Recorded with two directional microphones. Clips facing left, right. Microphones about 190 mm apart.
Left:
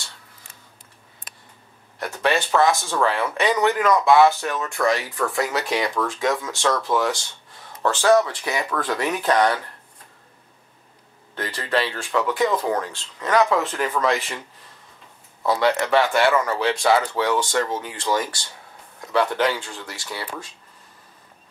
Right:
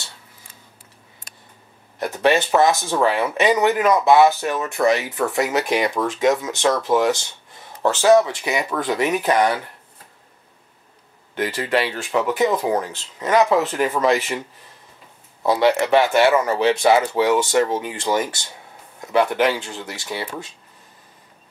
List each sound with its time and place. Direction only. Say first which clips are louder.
2.2 s speech: right 3 dB; 20° right (ahead or behind)
11.3 s speech: right 3 dB; 15° right (ahead or behind)
15.4 s speech: right 3 dB; 20° right (ahead or behind)